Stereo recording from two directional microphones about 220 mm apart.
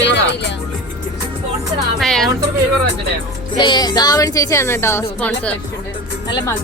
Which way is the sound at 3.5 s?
20° left (ahead or behind).